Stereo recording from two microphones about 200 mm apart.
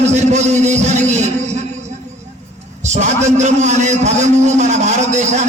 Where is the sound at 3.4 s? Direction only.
35° right (ahead or behind).